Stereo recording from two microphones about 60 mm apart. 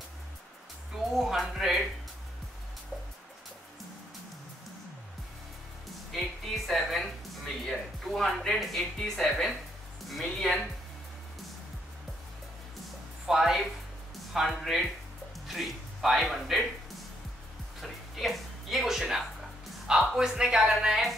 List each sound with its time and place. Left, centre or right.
1.1 s speech: centre
6.1 s music: centre
7.7 s speech: centre
13.3 s speech: centre
17.7 s music: centre
19.9 s speech: centre